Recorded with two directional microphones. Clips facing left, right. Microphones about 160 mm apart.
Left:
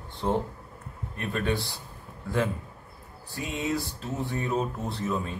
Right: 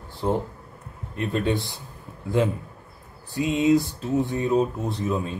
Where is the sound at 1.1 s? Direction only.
20° right (ahead or behind).